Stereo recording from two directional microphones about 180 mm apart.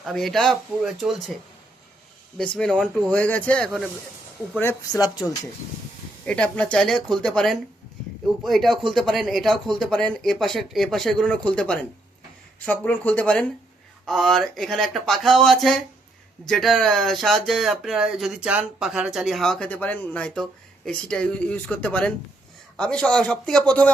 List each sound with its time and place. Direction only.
0.0 s speech: centre (ahead or behind)
2.4 s speech: 5° left (ahead or behind)
4.9 s speech: 20° left (ahead or behind)
6.2 s speech: 5° left (ahead or behind)